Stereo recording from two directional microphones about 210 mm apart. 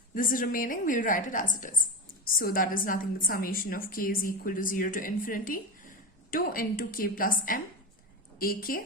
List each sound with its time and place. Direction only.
0.1 s a woman's voice: 40° left (ahead or behind)